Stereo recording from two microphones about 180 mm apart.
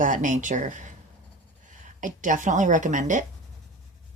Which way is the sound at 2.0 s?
45° right (ahead or behind).